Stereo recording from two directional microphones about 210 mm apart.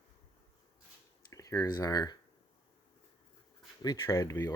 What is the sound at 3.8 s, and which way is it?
Speech, 15° left (ahead or behind).